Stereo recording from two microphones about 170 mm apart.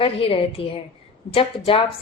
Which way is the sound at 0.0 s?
30° left (ahead or behind).